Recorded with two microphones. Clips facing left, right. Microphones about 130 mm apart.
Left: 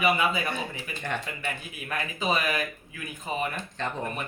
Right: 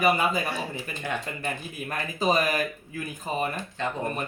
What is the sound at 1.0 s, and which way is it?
Speech, 5° right (ahead or behind).